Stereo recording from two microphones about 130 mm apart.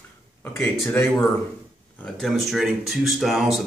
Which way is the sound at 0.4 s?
15° left (ahead or behind).